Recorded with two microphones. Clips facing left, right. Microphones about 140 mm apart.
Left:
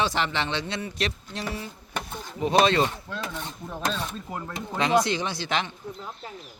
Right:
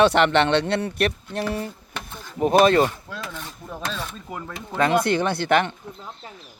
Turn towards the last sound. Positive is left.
turn(degrees=-55)  # may be behind; listen again after turning